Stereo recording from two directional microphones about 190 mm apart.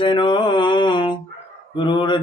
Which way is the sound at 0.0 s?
25° left (ahead or behind).